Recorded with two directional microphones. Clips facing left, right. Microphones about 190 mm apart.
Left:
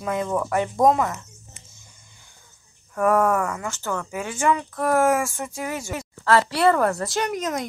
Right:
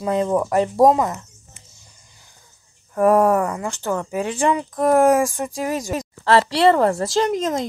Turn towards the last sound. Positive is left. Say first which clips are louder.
# right 5 dB
turn(degrees=-25)  # may be behind; listen again after turning